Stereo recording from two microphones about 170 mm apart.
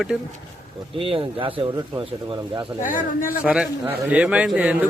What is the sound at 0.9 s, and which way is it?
Speech, 30° right (ahead or behind).